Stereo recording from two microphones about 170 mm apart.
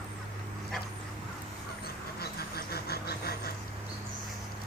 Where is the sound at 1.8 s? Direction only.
65° left (ahead or behind).